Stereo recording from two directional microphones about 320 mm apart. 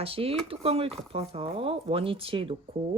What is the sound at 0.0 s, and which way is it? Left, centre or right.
Speech, centre.